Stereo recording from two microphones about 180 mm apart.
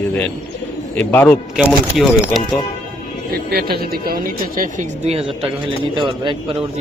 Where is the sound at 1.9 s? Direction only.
Centre (ahead or behind).